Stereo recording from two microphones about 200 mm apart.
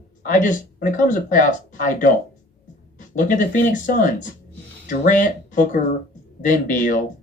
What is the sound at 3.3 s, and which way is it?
Speech, 40° left (ahead or behind).